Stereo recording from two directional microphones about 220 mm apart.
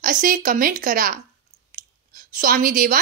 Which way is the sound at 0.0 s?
40° right (ahead or behind).